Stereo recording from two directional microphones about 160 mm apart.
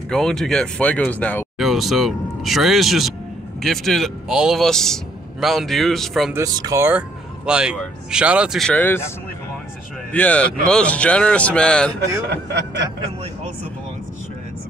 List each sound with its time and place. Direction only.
0.1 s speech: 5° left (ahead or behind)
1.6 s a man's voice: centre (ahead or behind)
6.3 s speech: 25° right (ahead or behind); by 9.1 s 15° left (ahead or behind)
10.1 s speech: 10° left (ahead or behind)
12.3 s speech: 90° right